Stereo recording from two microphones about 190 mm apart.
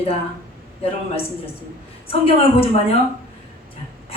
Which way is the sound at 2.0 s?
30° left (ahead or behind).